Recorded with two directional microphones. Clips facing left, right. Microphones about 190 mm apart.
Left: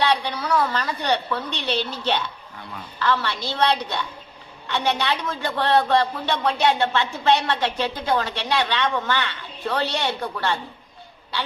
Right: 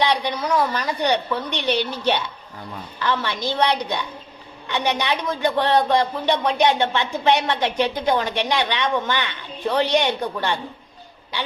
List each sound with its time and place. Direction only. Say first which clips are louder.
0.0 s speech: right 1 dB; 15° right (ahead or behind)